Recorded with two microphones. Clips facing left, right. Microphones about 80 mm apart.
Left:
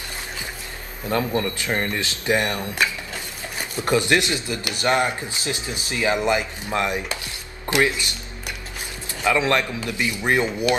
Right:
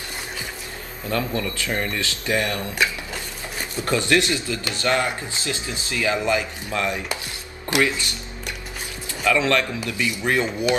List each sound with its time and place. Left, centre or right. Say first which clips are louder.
1.1 s speech: left 2 dB; left
3.8 s speech: left 1 dB; left
9.2 s speech: even; left